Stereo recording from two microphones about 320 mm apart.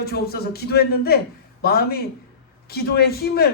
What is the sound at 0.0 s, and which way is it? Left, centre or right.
Speech, left.